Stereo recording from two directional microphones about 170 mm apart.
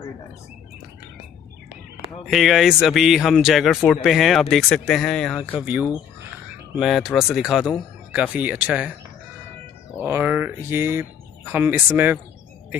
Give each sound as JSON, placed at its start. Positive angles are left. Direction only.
{"t": 2.2, "sound": "speech", "side_deg": 0}
{"t": 9.9, "sound": "speech", "side_deg": -15}